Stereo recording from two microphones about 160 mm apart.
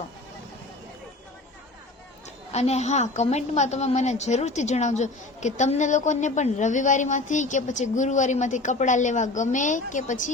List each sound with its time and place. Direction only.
2.5 s a woman's voice: 45° left (ahead or behind)